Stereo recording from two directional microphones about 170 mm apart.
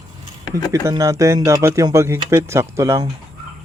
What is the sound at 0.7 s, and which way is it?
Speech, 15° right (ahead or behind).